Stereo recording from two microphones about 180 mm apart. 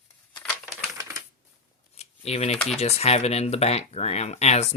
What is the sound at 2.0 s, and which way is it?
Shuffling cards, 35° left (ahead or behind).